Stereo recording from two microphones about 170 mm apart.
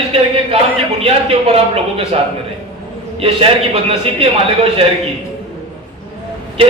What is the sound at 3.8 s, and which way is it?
A man's voice, 35° right (ahead or behind).